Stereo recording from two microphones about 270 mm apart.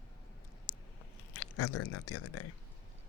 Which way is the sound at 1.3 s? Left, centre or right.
Left.